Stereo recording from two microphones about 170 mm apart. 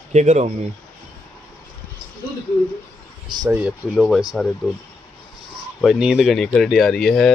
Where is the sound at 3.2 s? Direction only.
25° right (ahead or behind).